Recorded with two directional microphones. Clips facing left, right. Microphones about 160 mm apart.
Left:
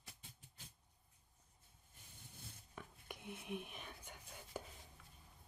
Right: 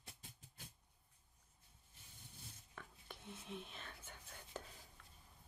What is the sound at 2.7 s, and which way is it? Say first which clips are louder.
Whispering: left 3 dB; 15° left (ahead or behind).